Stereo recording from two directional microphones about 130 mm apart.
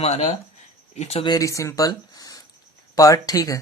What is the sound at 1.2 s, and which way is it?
Speech, 30° left (ahead or behind).